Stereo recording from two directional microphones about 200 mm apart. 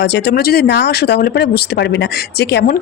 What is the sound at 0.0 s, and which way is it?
Speech, 60° left (ahead or behind).